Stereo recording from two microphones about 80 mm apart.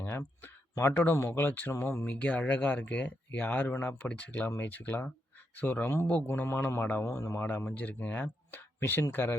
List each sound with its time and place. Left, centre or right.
0.0 s speech: left
1.7 s speech: left
2.0 s speech: centre
7.1 s speech: left
7.4 s speech: left